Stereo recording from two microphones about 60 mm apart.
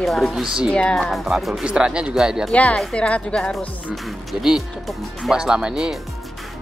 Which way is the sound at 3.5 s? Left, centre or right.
Centre.